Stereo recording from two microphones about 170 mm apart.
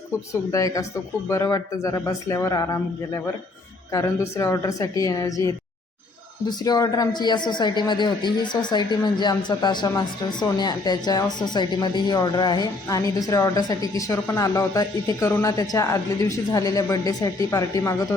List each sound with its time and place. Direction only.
0.5 s a woman's voice: 20° left (ahead or behind)